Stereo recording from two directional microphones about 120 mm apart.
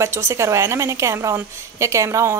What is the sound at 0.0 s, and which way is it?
Speech, 20° right (ahead or behind).